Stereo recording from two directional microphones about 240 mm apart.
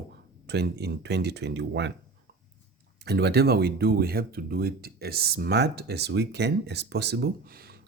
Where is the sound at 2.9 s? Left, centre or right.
Right.